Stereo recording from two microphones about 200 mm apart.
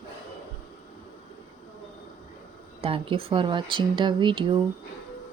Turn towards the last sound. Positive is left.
turn(degrees=-25)  # may be behind; listen again after turning